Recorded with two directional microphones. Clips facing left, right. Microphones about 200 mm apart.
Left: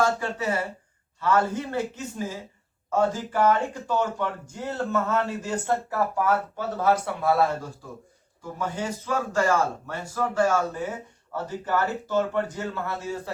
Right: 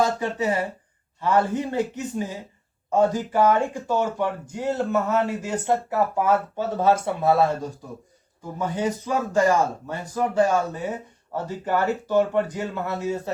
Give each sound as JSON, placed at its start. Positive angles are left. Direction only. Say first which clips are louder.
{"t": 0.0, "sound": "speech", "louder": "right 2 dB", "side_deg": -15}